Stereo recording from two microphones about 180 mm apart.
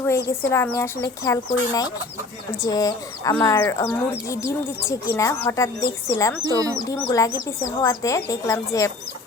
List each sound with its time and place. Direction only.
0.3 s speech: 15° left (ahead or behind)
6.5 s speech: 20° right (ahead or behind)
6.8 s speech: 20° left (ahead or behind)